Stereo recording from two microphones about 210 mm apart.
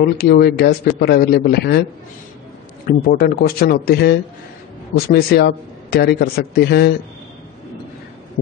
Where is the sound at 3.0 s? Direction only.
45° left (ahead or behind).